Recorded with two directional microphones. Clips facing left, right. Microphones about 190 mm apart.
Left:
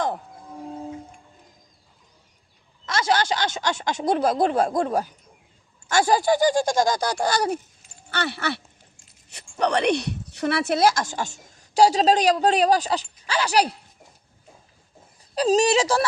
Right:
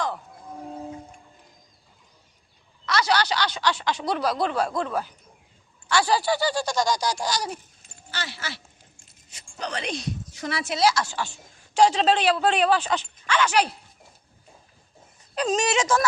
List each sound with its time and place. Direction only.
2.8 s speech: 50° left (ahead or behind)
15.4 s speech: 35° left (ahead or behind)